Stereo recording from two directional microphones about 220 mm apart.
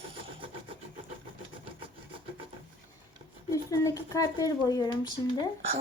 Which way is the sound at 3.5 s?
15° left (ahead or behind).